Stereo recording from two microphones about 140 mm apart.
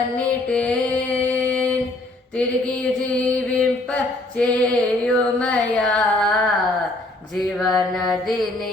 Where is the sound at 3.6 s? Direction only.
5° left (ahead or behind).